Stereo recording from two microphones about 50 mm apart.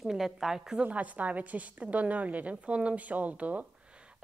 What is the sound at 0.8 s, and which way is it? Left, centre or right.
A woman's voice, right.